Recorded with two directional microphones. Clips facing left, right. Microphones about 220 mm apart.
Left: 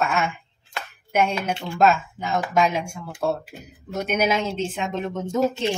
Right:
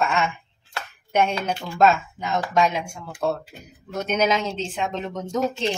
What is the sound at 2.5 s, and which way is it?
Speech, 10° left (ahead or behind).